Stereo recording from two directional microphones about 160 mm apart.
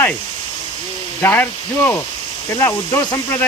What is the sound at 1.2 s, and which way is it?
Speech, 15° left (ahead or behind).